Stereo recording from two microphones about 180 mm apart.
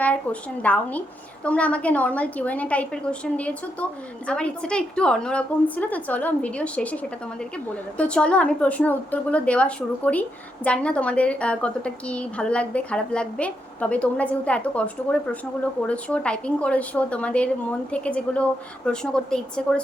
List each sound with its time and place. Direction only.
0.0 s a woman's voice: 10° left (ahead or behind)